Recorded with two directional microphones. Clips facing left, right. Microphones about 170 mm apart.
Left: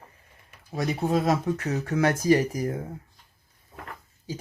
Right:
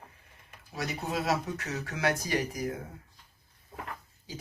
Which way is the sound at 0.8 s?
45° left (ahead or behind).